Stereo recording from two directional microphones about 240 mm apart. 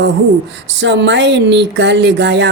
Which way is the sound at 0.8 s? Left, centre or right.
Right.